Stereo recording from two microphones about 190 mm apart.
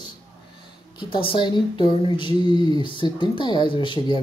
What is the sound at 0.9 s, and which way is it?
Speech, 25° left (ahead or behind).